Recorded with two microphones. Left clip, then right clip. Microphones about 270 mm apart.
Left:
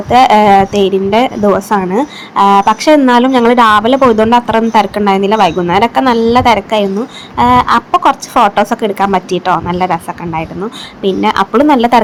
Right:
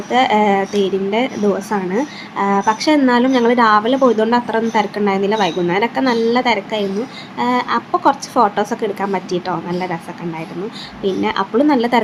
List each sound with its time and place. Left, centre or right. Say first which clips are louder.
0.1 s a woman's voice: left 8 dB; centre